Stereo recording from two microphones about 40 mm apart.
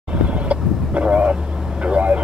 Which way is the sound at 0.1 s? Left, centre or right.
Right.